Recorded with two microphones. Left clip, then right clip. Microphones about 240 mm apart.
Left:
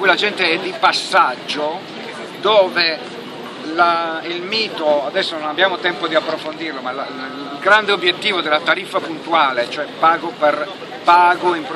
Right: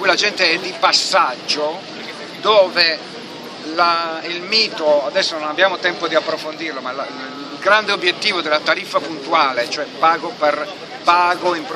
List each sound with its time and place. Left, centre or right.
0.0 s speech: centre